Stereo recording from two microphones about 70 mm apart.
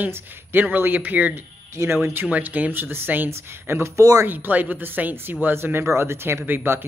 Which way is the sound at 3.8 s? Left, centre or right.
Right.